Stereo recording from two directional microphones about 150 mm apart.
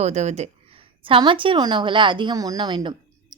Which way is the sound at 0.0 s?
50° right (ahead or behind).